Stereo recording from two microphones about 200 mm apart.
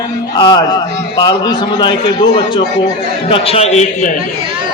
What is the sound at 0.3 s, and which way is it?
A man's voice, 20° left (ahead or behind).